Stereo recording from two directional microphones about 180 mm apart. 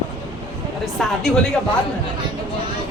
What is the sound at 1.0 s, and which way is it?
Speech, centre (ahead or behind).